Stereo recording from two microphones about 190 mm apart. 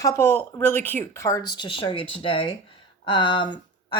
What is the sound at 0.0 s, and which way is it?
Speech, 15° left (ahead or behind).